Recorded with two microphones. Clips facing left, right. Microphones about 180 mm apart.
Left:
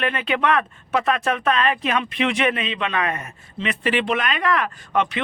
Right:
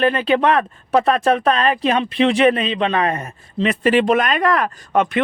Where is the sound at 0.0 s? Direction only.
35° right (ahead or behind).